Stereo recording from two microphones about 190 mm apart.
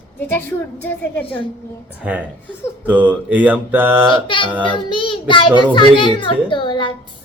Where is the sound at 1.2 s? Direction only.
25° left (ahead or behind).